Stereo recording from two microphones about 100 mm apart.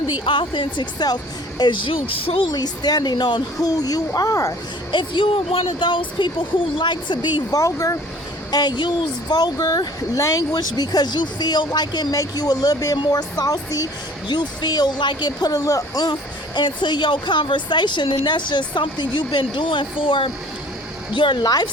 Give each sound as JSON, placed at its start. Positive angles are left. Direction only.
{"t": 0.3, "sound": "speech", "side_deg": 55}
{"t": 2.5, "sound": "speech", "side_deg": 40}
{"t": 4.9, "sound": "speech", "side_deg": 55}
{"t": 7.5, "sound": "speech", "side_deg": 35}
{"t": 8.4, "sound": "a woman's voice", "side_deg": 45}
{"t": 14.3, "sound": "a woman's voice", "side_deg": 45}
{"t": 16.6, "sound": "a woman's voice", "side_deg": 50}